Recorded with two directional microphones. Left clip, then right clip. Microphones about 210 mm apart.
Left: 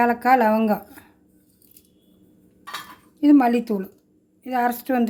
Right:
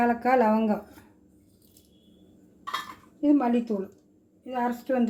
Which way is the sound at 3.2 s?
50° left (ahead or behind).